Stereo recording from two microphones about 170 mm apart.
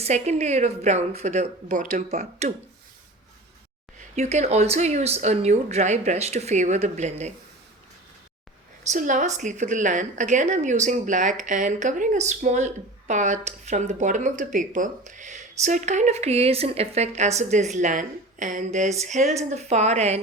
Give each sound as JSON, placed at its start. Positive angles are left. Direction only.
{"t": 0.0, "sound": "a woman's voice", "side_deg": -40}
{"t": 4.1, "sound": "a woman's voice", "side_deg": -45}
{"t": 8.8, "sound": "a woman's voice", "side_deg": -45}